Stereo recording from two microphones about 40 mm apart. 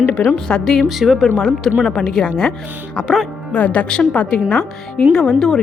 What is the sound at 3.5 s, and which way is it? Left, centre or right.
A woman's voice, left.